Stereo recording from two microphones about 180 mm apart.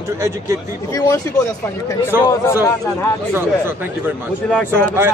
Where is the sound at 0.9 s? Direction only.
20° left (ahead or behind).